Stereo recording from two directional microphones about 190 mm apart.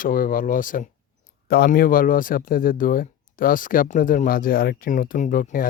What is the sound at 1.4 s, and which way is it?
Speech, 55° left (ahead or behind).